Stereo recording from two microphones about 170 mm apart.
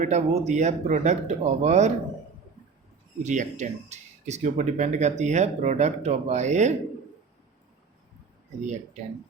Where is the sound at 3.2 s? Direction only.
45° right (ahead or behind).